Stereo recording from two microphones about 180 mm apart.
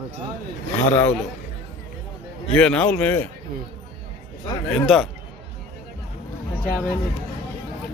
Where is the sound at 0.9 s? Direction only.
10° left (ahead or behind).